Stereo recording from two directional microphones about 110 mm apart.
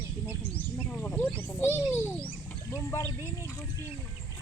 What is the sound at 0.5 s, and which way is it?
Speech, 15° left (ahead or behind).